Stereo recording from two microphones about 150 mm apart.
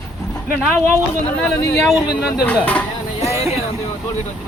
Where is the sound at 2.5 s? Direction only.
10° left (ahead or behind).